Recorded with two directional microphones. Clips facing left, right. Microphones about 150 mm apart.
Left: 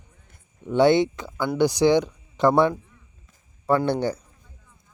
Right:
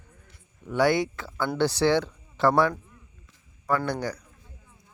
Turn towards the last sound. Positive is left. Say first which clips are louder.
# left 5 dB
turn(degrees=25)  # may be behind; listen again after turning